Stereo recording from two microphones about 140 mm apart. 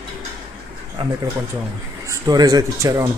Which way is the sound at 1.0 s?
35° right (ahead or behind).